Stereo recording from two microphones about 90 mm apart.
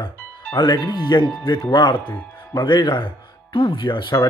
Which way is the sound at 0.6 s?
50° left (ahead or behind).